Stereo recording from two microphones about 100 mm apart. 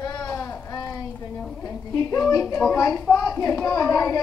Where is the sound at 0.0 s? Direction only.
40° left (ahead or behind).